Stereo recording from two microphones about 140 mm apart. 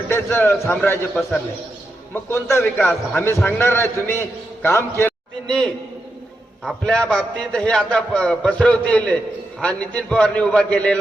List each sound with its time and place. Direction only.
0.1 s a man's voice: 15° left (ahead or behind)
2.1 s a man's voice: 15° left (ahead or behind)
5.5 s a man's voice: 5° left (ahead or behind)